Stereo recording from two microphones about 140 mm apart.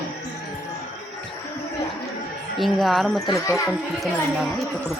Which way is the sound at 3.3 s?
20° left (ahead or behind).